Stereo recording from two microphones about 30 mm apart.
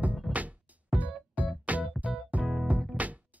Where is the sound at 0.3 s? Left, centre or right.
Right.